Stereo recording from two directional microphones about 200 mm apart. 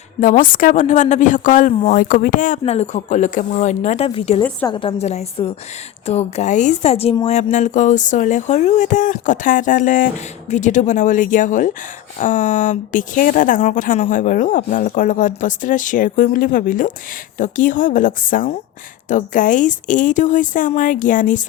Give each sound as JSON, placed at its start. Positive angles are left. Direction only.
{"t": 0.2, "sound": "a woman's voice", "side_deg": 40}